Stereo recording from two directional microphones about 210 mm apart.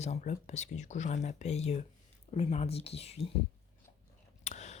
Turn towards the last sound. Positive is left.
turn(degrees=35)  # may be behind; listen again after turning